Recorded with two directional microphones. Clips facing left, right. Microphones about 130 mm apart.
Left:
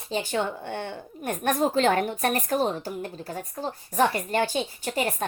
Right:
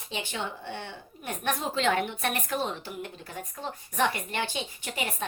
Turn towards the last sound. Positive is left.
turn(degrees=40)  # may be behind; listen again after turning